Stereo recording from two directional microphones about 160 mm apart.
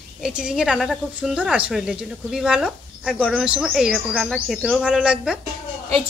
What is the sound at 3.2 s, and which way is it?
Speech, 5° left (ahead or behind).